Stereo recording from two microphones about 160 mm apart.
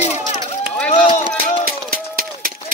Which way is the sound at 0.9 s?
40° left (ahead or behind).